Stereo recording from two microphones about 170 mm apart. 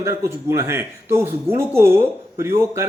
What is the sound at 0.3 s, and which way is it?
Speech, 15° right (ahead or behind).